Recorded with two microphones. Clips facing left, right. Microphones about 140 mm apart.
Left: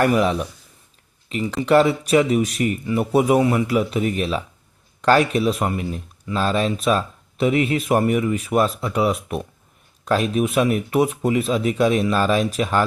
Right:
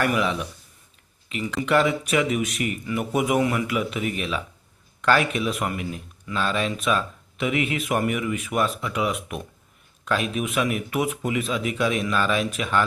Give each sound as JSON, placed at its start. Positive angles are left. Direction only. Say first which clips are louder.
{"t": 0.0, "sound": "speech", "louder": "left 5 dB", "side_deg": 40}